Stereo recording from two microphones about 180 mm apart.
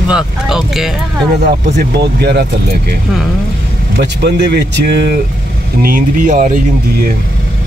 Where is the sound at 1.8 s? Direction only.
65° right (ahead or behind).